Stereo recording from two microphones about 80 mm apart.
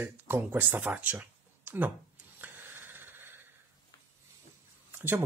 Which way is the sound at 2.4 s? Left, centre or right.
Right.